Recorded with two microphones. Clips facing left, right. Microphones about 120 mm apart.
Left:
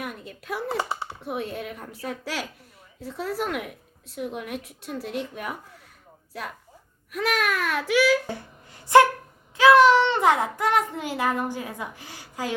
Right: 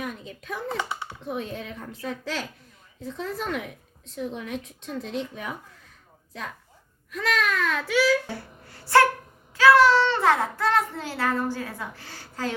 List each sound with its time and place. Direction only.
0.0 s speech: 5° left (ahead or behind)
0.8 s speech: 35° left (ahead or behind)
1.2 s a child's voice: 10° left (ahead or behind)
7.1 s a child's voice: 10° left (ahead or behind)